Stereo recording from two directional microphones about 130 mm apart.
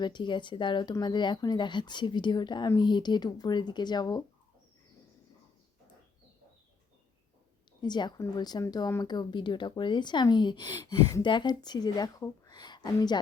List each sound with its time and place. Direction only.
0.0 s a woman's voice: 35° left (ahead or behind)
7.8 s a woman's voice: 35° left (ahead or behind)